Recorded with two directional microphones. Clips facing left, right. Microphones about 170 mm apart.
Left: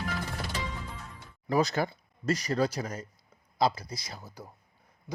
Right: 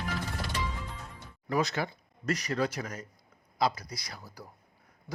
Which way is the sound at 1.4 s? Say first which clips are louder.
Left 3 dB; 35° left (ahead or behind).